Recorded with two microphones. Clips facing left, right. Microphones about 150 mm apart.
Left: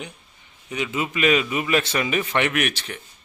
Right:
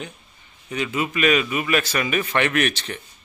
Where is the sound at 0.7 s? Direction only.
15° left (ahead or behind).